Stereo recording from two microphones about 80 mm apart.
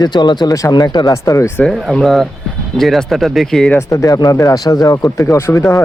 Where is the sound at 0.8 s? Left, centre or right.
Left.